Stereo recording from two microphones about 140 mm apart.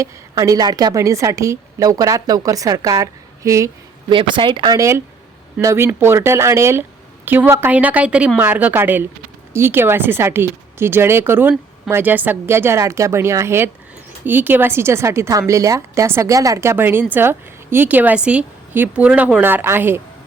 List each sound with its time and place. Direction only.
0.0 s a woman's voice: 25° right (ahead or behind)
4.1 s a woman's voice: 35° right (ahead or behind); by 20.0 s 15° right (ahead or behind)